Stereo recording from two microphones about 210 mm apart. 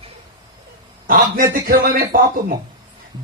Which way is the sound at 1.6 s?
40° right (ahead or behind).